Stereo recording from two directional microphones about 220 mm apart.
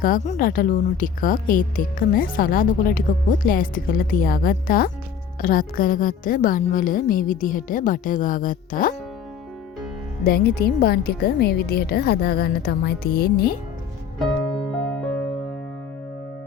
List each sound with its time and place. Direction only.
0.0 s a woman's voice: 35° left (ahead or behind)
10.2 s a woman's voice: 45° left (ahead or behind)